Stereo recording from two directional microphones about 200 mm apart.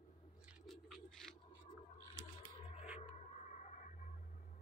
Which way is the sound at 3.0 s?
40° left (ahead or behind).